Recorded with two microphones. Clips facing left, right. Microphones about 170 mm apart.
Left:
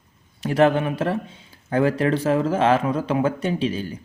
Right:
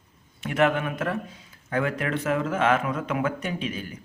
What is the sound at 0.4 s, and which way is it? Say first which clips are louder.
A man's voice: left 5 dB; 35° left (ahead or behind).